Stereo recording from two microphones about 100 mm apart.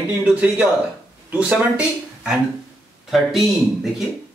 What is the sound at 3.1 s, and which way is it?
Speech, 5° right (ahead or behind).